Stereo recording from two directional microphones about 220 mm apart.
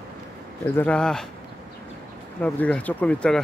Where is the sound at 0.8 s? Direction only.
5° left (ahead or behind).